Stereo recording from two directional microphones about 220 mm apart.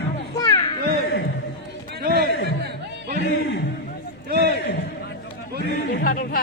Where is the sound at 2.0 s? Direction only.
45° right (ahead or behind).